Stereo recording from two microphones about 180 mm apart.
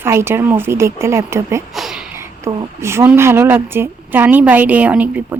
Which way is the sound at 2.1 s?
15° right (ahead or behind).